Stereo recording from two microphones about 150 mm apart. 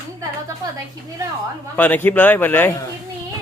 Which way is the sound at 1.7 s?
10° left (ahead or behind).